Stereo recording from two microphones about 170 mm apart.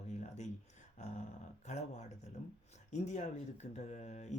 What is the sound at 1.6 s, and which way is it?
Speech, 45° left (ahead or behind).